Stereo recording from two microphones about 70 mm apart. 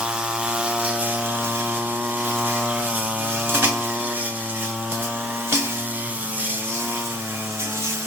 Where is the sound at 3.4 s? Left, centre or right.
Right.